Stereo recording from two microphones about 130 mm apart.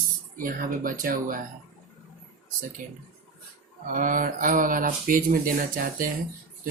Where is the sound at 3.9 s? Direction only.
90° right.